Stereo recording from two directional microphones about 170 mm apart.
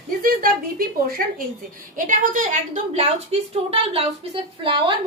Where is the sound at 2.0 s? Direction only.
50° right (ahead or behind); by 5.0 s 30° right (ahead or behind).